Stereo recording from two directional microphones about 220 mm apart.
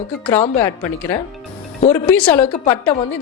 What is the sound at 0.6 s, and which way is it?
A woman's voice, 10° left (ahead or behind).